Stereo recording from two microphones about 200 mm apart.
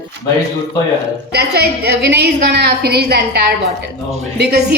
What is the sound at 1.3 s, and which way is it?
A woman's voice, 55° right (ahead or behind).